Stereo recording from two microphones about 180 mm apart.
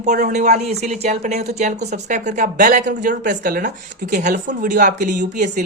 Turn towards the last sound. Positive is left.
turn(degrees=-45)  # may be behind; listen again after turning